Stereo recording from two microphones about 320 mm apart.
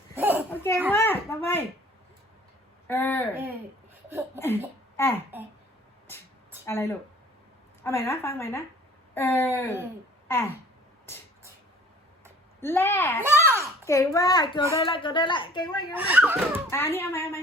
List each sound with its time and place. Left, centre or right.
0.1 s children playing: centre
0.5 s children playing: centre
0.9 s a sound: centre
2.8 s speech: centre
4.4 s speech: centre
6.7 s speech: centre
12.5 s speech: centre
13.2 s a sound: centre
13.8 s speech: centre
16.0 s speech: centre
16.6 s speech: centre